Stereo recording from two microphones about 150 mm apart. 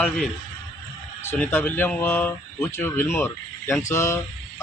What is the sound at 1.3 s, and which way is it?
A man's voice, 15° left (ahead or behind).